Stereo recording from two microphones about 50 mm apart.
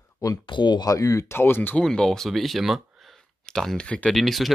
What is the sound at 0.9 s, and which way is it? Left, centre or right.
Speech, left.